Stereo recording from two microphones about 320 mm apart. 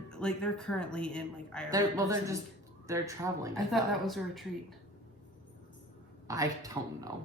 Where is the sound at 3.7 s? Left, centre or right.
Centre.